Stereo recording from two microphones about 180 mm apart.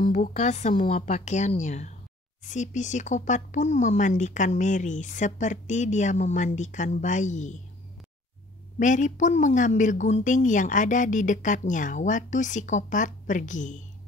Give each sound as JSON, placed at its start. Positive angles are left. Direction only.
{"t": 0.0, "sound": "a woman's voice", "side_deg": 45}
{"t": 8.7, "sound": "speech", "side_deg": 45}